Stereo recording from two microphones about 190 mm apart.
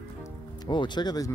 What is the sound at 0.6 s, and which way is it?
Speech, 25° left (ahead or behind).